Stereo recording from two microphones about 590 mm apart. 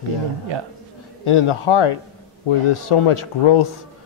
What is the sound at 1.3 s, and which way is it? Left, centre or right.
Speech, left.